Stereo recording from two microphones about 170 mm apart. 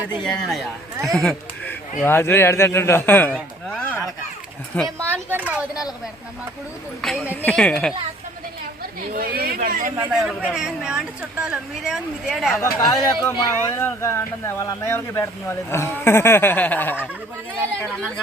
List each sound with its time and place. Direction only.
0.2 s speech: 5° left (ahead or behind)
2.0 s speech: 15° left (ahead or behind)
4.9 s speech: 15° right (ahead or behind)
7.0 s speech: centre (ahead or behind)
8.8 s a woman's voice: 60° right (ahead or behind)
10.0 s speech: 5° right (ahead or behind)
12.9 s speech: 20° left (ahead or behind)
13.7 s speech: 15° left (ahead or behind)